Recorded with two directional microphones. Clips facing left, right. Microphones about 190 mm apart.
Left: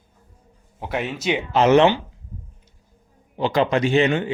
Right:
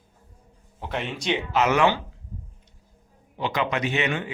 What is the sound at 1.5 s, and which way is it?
Speech, 30° left (ahead or behind).